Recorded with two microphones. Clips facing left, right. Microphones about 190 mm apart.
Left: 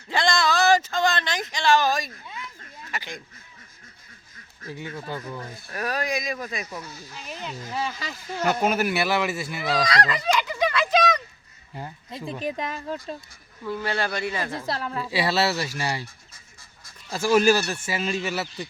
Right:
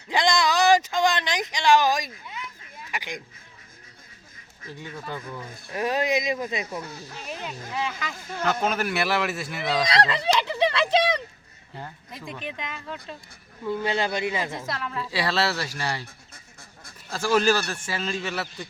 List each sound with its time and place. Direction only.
0.1 s a sound: 15° right (ahead or behind)
2.9 s speech: 15° right (ahead or behind)
4.8 s a man's voice: 5° left (ahead or behind)
5.6 s speech: 20° right (ahead or behind)
8.4 s a man's voice: 10° left (ahead or behind)
9.8 s speech: 25° right (ahead or behind)
12.1 s speech: 30° left (ahead or behind)
13.7 s speech: 20° right (ahead or behind)
14.7 s speech: 35° left (ahead or behind)
15.1 s speech: 10° left (ahead or behind)
16.3 s duck: 55° right (ahead or behind)
17.1 s speech: 10° left (ahead or behind)